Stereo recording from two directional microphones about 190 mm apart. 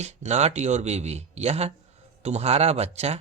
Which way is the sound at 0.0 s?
35° right (ahead or behind).